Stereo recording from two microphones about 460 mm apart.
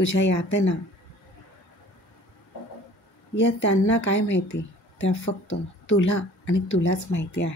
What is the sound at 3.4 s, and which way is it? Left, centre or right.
A woman's voice, left.